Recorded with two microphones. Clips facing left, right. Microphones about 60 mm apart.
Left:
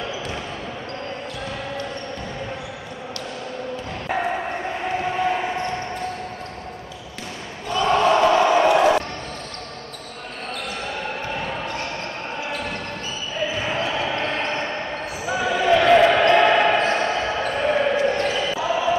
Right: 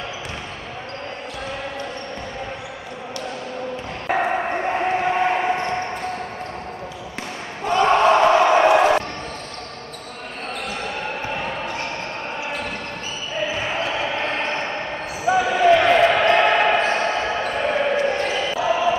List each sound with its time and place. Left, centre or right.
4.2 s bow-wow: right
4.6 s basketball bounce: right
7.6 s a sound: right
11.0 s basketball bounce: centre